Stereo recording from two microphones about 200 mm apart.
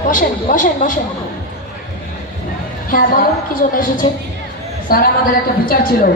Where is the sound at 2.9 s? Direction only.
45° left (ahead or behind).